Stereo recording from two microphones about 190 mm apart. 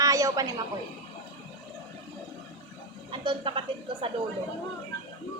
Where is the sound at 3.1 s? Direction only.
30° right (ahead or behind).